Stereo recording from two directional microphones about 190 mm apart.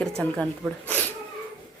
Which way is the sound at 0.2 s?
5° left (ahead or behind).